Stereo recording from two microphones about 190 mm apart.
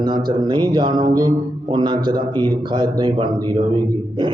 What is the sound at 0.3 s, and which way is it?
Speech, 25° right (ahead or behind).